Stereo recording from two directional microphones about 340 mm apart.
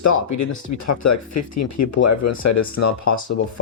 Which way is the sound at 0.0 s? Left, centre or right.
Left.